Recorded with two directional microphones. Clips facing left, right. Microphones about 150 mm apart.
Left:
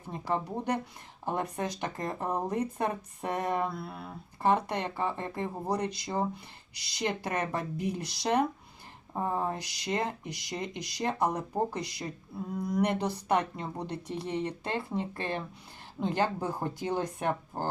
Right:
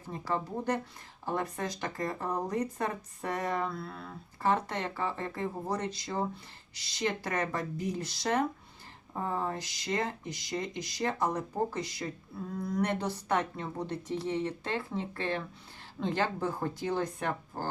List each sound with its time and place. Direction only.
0.3 s a woman's voice: 15° left (ahead or behind)